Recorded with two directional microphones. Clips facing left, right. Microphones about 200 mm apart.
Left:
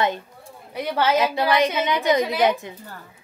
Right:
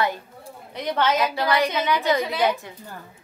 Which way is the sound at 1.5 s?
20° left (ahead or behind).